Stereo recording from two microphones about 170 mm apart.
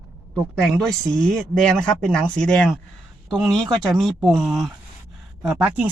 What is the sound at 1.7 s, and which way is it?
Speech, 5° left (ahead or behind).